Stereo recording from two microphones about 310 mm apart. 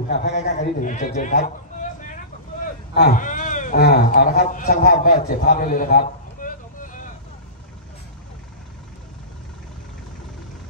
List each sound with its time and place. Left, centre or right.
0.1 s a man's voice: left